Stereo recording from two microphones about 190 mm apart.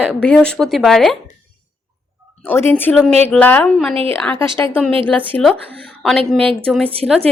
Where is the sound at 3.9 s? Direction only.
30° right (ahead or behind).